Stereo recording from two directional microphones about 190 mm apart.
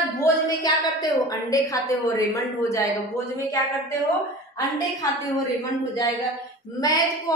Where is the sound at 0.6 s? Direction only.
20° left (ahead or behind).